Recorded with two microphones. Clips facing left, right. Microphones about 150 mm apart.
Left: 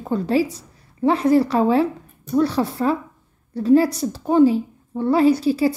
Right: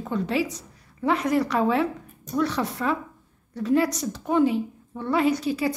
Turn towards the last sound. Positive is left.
turn(degrees=30)  # may be behind; listen again after turning